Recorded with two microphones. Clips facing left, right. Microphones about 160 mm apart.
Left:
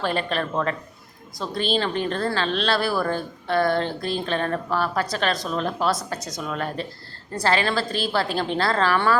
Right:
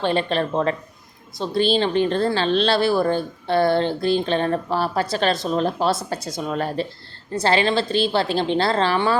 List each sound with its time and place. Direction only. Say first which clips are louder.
0.0 s a woman's voice: right 4 dB; 30° right (ahead or behind)